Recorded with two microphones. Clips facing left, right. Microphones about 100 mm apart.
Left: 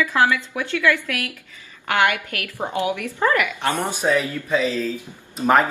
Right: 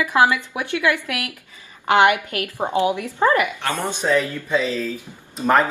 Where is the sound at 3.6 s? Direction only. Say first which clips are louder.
Left 1 dB; 15° left (ahead or behind).